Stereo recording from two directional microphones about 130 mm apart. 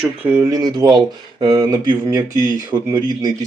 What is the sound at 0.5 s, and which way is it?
Speech, 30° right (ahead or behind).